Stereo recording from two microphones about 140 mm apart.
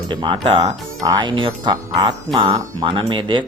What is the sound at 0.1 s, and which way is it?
Speech, 35° right (ahead or behind).